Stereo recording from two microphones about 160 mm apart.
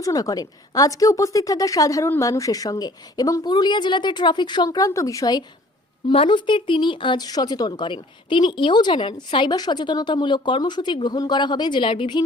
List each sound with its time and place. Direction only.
0.0 s speech: 20° left (ahead or behind)